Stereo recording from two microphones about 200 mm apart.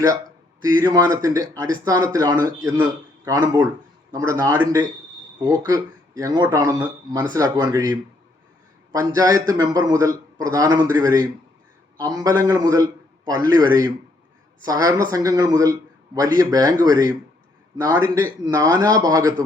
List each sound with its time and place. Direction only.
0.6 s a man's voice: 20° right (ahead or behind)